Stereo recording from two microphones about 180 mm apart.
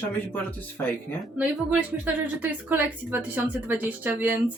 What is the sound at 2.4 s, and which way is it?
A woman's voice, 10° right (ahead or behind).